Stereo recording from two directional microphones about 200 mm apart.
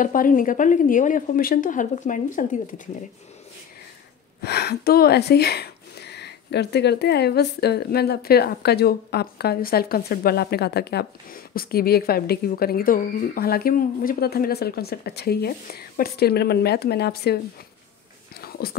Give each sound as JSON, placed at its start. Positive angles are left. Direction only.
{"t": 0.0, "sound": "a woman's voice", "side_deg": 45}
{"t": 4.4, "sound": "speech", "side_deg": 55}
{"t": 18.3, "sound": "a sound", "side_deg": 50}